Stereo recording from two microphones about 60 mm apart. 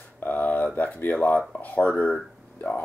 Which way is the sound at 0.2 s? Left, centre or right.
Left.